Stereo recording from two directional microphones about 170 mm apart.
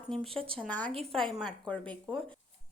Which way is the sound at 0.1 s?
Centre (ahead or behind).